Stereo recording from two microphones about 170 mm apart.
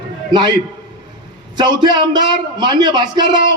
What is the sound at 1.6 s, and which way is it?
A man's voice, 25° right (ahead or behind).